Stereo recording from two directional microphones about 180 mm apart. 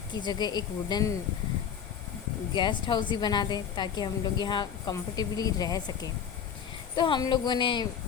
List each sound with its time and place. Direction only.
0.1 s a woman's voice: 25° left (ahead or behind)
2.5 s a woman's voice: 25° left (ahead or behind)